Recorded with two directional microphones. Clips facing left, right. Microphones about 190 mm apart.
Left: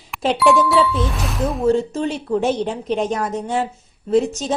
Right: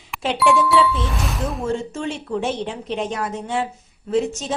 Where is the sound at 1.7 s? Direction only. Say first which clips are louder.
Left 6 dB; 35° left (ahead or behind).